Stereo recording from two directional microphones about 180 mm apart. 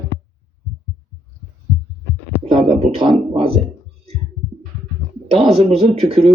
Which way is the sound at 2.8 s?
30° right (ahead or behind).